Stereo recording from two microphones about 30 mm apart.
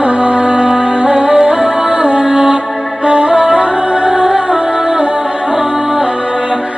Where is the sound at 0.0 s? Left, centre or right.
Right.